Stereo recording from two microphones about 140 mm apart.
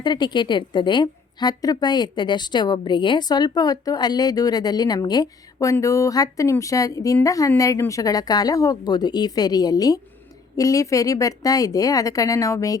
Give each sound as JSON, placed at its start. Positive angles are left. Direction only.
{"t": 0.0, "sound": "a woman's voice", "side_deg": 30}